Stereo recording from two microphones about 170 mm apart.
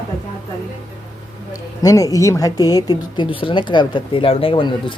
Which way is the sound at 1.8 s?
20° left (ahead or behind).